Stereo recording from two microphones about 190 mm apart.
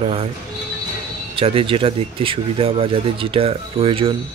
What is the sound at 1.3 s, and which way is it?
Speech, 30° right (ahead or behind).